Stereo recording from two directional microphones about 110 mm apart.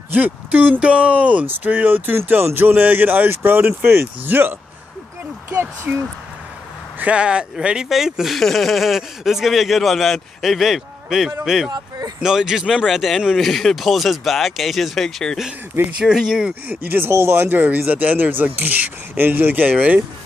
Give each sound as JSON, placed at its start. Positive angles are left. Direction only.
{"t": 0.1, "sound": "speech", "side_deg": -15}
{"t": 7.0, "sound": "speech", "side_deg": -10}
{"t": 16.6, "sound": "speech", "side_deg": -20}